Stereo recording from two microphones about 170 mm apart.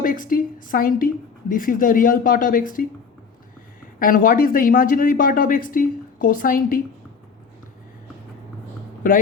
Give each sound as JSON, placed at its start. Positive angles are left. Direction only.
{"t": 0.0, "sound": "a woman's voice", "side_deg": 55}
{"t": 4.0, "sound": "a woman's voice", "side_deg": 55}